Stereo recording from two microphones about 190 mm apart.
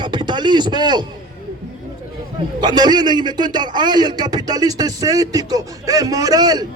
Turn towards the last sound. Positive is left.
turn(degrees=-20)  # may be behind; listen again after turning